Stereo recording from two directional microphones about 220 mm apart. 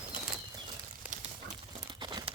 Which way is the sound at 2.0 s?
20° right (ahead or behind).